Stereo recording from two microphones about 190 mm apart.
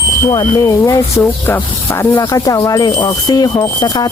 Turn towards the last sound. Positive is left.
turn(degrees=20)  # may be behind; listen again after turning